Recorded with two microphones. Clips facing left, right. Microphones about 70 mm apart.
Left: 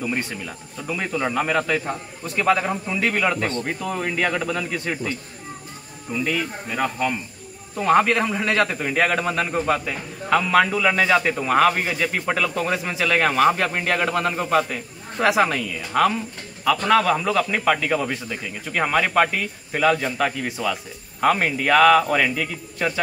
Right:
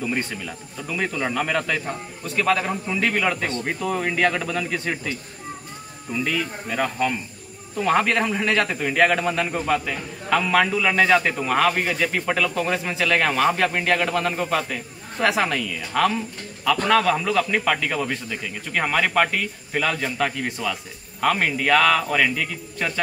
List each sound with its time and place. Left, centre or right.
0.0 s a man's voice: centre
6.1 s a man's voice: centre